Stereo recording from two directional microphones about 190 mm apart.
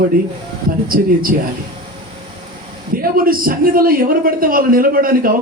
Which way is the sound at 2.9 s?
50° right (ahead or behind).